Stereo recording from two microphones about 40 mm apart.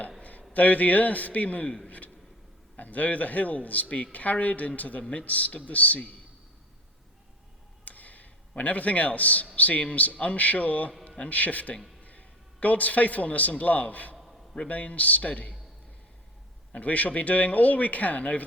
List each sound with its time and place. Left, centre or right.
0.2 s a sound: left
0.5 s a man's voice: left
2.7 s a man's voice: left
7.9 s a sound: left
9.6 s a man's voice: left
16.7 s a man's voice: left